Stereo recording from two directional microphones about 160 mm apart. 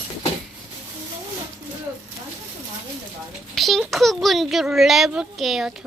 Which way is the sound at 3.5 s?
Centre (ahead or behind).